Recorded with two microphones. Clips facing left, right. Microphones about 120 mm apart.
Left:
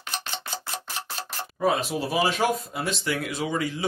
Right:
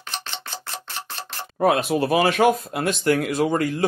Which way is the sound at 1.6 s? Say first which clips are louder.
Right 5 dB; 60° right (ahead or behind).